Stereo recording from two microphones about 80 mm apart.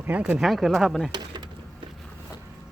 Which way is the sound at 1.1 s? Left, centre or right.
Right.